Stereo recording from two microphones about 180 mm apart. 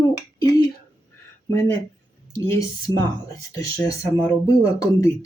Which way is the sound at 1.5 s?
15° left (ahead or behind).